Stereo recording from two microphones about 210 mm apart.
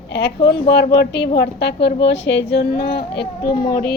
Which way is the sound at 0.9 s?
50° left (ahead or behind).